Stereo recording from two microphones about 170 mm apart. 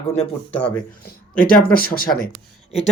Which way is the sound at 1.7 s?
60° left (ahead or behind).